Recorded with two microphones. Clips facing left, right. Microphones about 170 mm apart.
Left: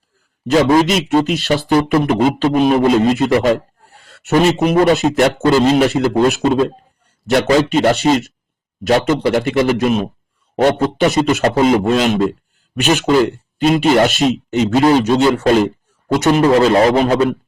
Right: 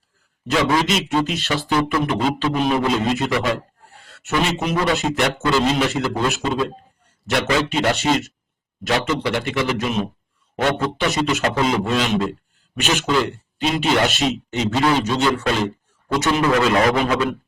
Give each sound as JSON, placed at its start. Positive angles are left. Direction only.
{"t": 0.5, "sound": "a man's voice", "side_deg": 40}
{"t": 2.5, "sound": "a man's voice", "side_deg": 50}